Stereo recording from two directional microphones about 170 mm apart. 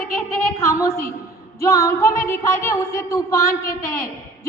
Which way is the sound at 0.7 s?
20° left (ahead or behind).